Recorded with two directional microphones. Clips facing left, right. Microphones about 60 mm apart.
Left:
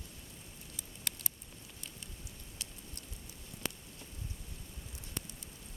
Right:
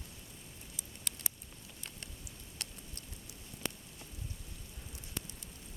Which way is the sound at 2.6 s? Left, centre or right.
Right.